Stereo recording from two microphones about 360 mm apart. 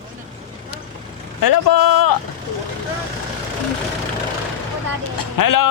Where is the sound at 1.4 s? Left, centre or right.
Left.